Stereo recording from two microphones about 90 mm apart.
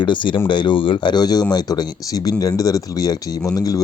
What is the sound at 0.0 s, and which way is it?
Speech, 65° left (ahead or behind).